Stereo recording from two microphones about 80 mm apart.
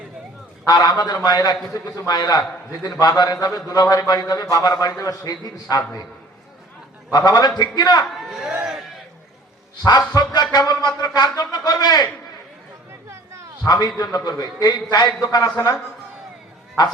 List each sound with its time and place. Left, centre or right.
0.6 s a man's voice: left
7.1 s speech: left
8.3 s speech: centre
10.2 s speech: left
13.7 s speech: left